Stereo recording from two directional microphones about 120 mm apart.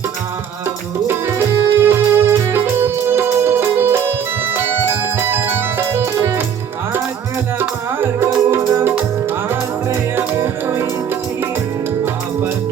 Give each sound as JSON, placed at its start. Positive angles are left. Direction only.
{"t": 1.0, "sound": "music", "side_deg": -20}
{"t": 5.1, "sound": "music", "side_deg": -20}
{"t": 7.6, "sound": "music", "side_deg": -20}